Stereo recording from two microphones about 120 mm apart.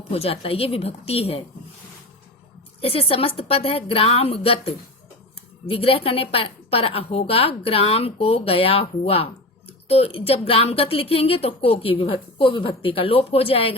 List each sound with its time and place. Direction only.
0.1 s a woman's voice: 55° left (ahead or behind)
2.8 s a woman's voice: 55° left (ahead or behind)